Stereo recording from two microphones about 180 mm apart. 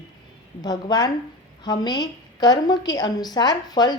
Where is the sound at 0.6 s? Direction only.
20° left (ahead or behind).